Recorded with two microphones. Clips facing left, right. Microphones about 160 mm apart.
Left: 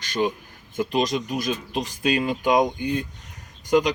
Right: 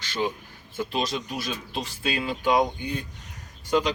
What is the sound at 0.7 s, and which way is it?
Speech, 15° left (ahead or behind).